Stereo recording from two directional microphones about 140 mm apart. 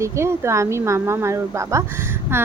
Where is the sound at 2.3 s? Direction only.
15° right (ahead or behind).